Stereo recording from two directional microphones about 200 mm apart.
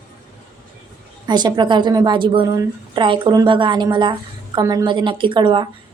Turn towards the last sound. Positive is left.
turn(degrees=-25)  # may be behind; listen again after turning